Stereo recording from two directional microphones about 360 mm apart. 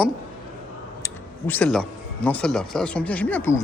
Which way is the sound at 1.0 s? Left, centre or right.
Centre.